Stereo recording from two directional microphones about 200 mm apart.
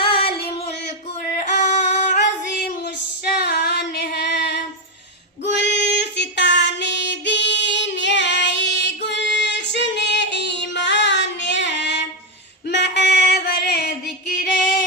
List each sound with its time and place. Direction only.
0.0 s female singing: 25° left (ahead or behind)
3.3 s female singing: 55° left (ahead or behind)
4.0 s music: 55° left (ahead or behind)
5.5 s female singing: 60° left (ahead or behind)
12.6 s singing: 60° left (ahead or behind)